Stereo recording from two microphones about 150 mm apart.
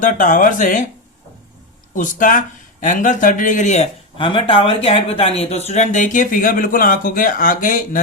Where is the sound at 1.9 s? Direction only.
60° left (ahead or behind).